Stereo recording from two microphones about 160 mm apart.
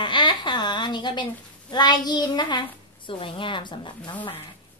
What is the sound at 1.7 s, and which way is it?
Child singing, 25° left (ahead or behind).